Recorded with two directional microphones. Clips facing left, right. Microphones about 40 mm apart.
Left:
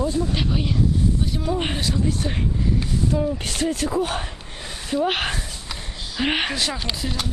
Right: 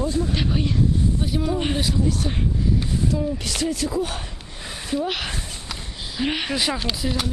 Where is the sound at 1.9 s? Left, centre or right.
Left.